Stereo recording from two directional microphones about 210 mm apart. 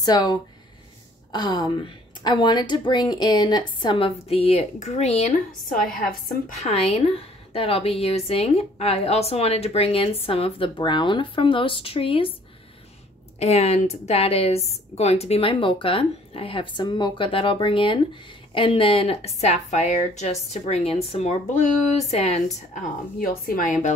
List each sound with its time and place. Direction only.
0.0 s a woman's voice: 20° left (ahead or behind)
13.4 s a woman's voice: 30° left (ahead or behind)
23.1 s a woman's voice: 45° left (ahead or behind)